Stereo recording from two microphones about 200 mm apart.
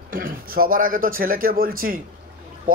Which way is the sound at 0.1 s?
45° right (ahead or behind).